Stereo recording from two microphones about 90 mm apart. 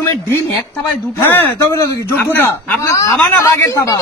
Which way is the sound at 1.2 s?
25° left (ahead or behind).